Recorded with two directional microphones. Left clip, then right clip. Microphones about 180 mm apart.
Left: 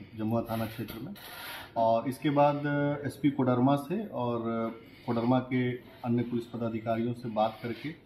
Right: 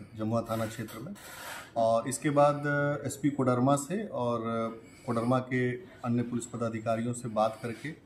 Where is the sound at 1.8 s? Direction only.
20° right (ahead or behind).